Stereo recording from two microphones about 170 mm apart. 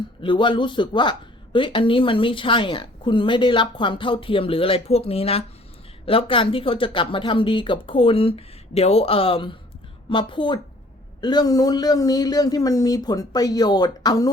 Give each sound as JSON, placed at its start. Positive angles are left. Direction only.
{"t": 0.2, "sound": "a woman's voice", "side_deg": 30}